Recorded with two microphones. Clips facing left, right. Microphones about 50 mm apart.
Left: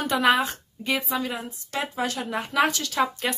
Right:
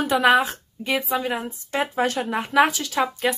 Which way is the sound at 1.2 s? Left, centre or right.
Right.